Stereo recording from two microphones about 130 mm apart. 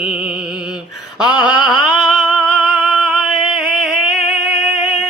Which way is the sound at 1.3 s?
30° left (ahead or behind).